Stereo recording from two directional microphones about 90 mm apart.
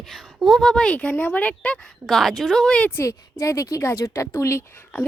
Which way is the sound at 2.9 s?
30° left (ahead or behind).